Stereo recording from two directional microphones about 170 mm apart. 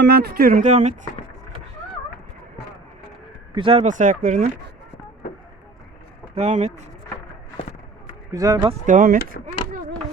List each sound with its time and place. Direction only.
0.0 s speech: 75° right (ahead or behind)
0.6 s speech: 40° right (ahead or behind)
3.5 s speech: 30° right (ahead or behind)
3.8 s speech: 50° right (ahead or behind)
6.3 s speech: 40° right (ahead or behind)
8.3 s speech: 20° right (ahead or behind)
8.9 s speech: 50° right (ahead or behind)
9.4 s speech: 90° left